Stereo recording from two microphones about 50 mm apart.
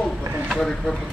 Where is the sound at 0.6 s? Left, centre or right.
Centre.